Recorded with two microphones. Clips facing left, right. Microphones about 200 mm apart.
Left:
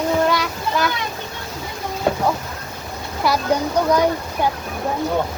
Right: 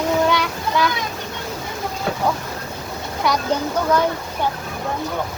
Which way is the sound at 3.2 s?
Centre (ahead or behind).